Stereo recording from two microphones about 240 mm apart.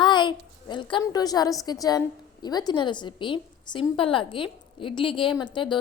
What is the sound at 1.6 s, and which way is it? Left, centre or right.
A woman's voice, centre.